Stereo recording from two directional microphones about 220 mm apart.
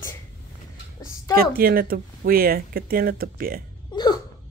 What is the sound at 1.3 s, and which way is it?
Speech, 40° right (ahead or behind).